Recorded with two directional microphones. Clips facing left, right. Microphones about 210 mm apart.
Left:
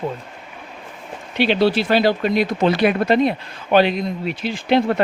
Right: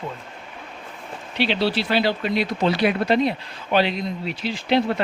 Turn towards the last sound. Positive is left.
turn(degrees=55)  # may be behind; listen again after turning